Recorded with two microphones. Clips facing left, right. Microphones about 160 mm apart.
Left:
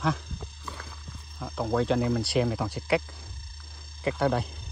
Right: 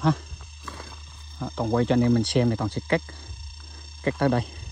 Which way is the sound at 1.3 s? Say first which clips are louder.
Right 3 dB; centre (ahead or behind).